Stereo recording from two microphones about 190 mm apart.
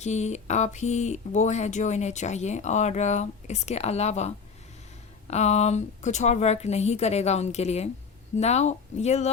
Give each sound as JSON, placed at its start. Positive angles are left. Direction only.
{"t": 0.0, "sound": "speech", "side_deg": 35}
{"t": 5.3, "sound": "speech", "side_deg": 35}